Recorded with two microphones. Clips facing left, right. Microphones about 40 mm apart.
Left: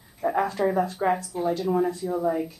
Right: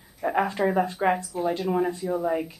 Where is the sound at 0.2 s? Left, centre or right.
Right.